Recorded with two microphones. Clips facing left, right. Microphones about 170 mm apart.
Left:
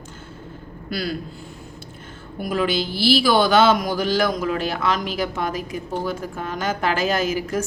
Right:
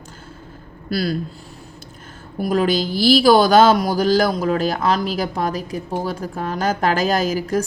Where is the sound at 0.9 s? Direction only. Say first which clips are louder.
Right 5 dB; 35° right (ahead or behind).